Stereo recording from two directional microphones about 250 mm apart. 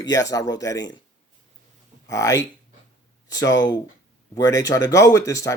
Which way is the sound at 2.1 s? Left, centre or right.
Centre.